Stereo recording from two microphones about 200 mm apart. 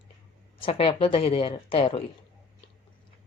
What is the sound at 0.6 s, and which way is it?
Speech, 30° left (ahead or behind).